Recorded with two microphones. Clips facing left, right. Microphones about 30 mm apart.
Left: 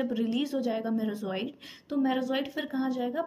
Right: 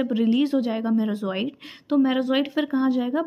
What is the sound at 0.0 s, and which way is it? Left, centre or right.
Speech, right.